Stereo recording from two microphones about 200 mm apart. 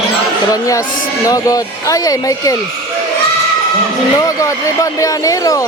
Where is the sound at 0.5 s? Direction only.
15° left (ahead or behind).